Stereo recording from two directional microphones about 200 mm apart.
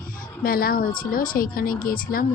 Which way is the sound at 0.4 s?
45° left (ahead or behind).